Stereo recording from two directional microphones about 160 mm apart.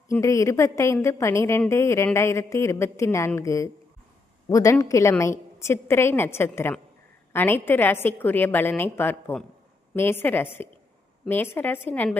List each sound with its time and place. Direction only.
0.1 s a woman's voice: 20° left (ahead or behind)